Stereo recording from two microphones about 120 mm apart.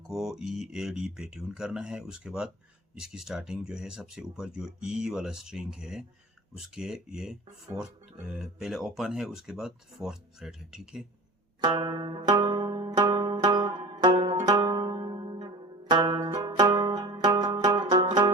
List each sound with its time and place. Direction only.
0.1 s speech: centre (ahead or behind)
11.6 s zither: 35° right (ahead or behind)
14.3 s zither: 30° right (ahead or behind)
16.0 s music: 35° right (ahead or behind)